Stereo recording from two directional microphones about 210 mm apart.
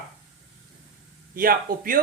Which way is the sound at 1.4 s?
45° right (ahead or behind).